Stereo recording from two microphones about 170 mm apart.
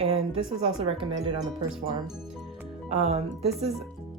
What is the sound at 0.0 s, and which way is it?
Speech, 35° right (ahead or behind).